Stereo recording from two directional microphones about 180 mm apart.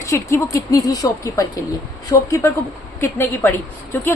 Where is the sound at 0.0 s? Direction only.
15° left (ahead or behind).